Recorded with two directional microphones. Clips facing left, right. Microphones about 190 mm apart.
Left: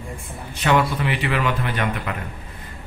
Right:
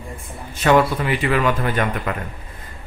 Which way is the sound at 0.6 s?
45° right (ahead or behind).